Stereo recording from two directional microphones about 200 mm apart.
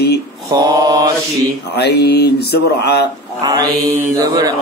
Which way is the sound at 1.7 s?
55° left (ahead or behind).